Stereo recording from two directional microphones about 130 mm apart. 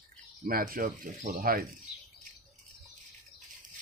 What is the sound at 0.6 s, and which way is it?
Speech, 90° right.